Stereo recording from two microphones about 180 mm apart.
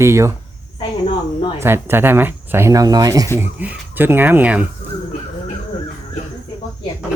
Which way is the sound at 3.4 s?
10° right (ahead or behind).